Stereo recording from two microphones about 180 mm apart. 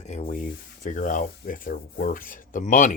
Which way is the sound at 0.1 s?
40° left (ahead or behind).